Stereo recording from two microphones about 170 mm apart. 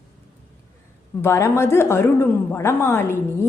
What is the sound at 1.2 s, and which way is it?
A woman's voice, 15° left (ahead or behind).